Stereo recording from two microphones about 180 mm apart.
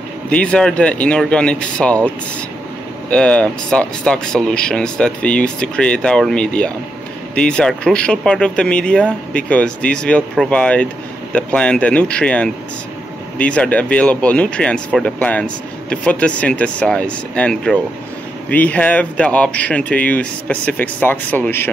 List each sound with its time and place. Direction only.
0.3 s speech: 5° left (ahead or behind)
3.1 s speech: 5° left (ahead or behind)